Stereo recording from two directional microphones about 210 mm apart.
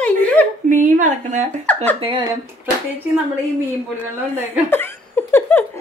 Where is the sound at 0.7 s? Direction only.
40° right (ahead or behind).